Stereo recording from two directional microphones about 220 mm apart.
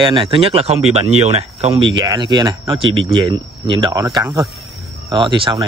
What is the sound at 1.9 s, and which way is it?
Speech, 20° right (ahead or behind).